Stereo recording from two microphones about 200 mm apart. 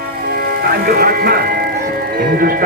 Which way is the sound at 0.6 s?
50° right (ahead or behind).